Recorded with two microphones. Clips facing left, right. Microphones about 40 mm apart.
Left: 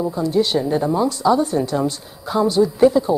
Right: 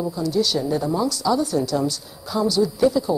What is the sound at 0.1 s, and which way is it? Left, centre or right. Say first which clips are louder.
Speech: left 4 dB; left.